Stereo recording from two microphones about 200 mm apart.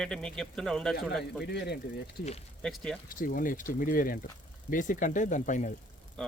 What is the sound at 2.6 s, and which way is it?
Speech, 5° left (ahead or behind).